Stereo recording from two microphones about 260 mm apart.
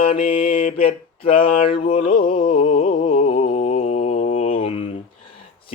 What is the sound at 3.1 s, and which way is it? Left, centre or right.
Mantra, left.